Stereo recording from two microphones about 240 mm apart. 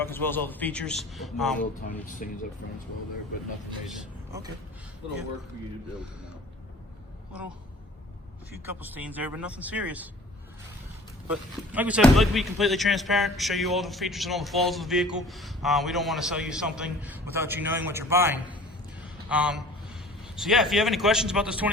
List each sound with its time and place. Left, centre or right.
0.0 s speech: centre
1.9 s speech: left
8.6 s speech: centre
11.3 s speech: centre